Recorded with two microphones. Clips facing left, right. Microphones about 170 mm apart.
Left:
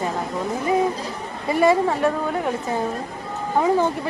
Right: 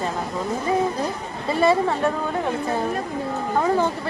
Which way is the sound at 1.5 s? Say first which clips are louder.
Left 1 dB; 15° left (ahead or behind).